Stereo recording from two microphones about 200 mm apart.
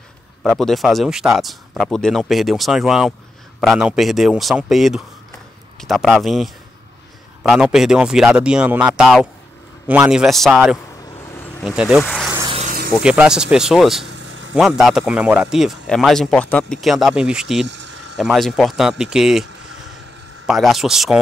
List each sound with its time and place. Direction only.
0.4 s speech: centre (ahead or behind)
12.0 s speech: 10° left (ahead or behind)
12.4 s vehicle: 30° right (ahead or behind)
13.0 s speech: 5° right (ahead or behind)
20.4 s speech: centre (ahead or behind)